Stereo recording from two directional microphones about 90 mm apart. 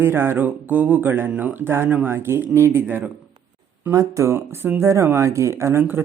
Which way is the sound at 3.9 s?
35° right (ahead or behind).